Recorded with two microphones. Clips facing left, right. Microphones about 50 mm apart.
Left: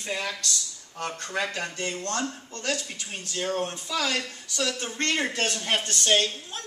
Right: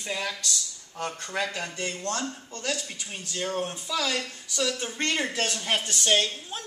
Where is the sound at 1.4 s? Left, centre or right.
Centre.